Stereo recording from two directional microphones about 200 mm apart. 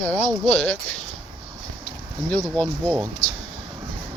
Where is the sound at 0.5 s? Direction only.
5° left (ahead or behind).